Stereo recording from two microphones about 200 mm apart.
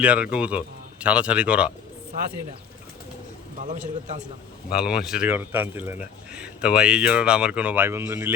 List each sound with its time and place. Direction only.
0.0 s speech: 5° right (ahead or behind)
3.6 s a man's voice: 35° right (ahead or behind)
4.7 s speech: 5° right (ahead or behind)